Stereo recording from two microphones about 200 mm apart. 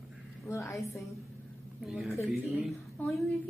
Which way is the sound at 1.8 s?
Centre (ahead or behind).